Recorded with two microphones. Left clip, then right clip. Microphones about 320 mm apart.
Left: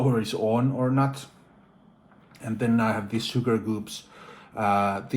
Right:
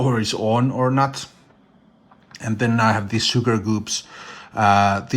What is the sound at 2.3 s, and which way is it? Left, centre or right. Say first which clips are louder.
Speech: right 5 dB; right.